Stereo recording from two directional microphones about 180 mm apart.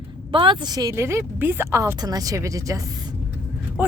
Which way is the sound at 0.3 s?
30° right (ahead or behind).